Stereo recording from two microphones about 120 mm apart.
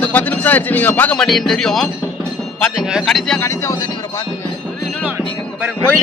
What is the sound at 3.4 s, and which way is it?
Speech, 20° left (ahead or behind).